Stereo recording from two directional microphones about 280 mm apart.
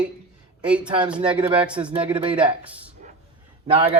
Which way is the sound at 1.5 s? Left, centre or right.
Centre.